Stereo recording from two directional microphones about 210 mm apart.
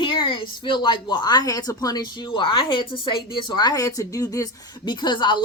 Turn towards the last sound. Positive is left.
turn(degrees=20)  # may be behind; listen again after turning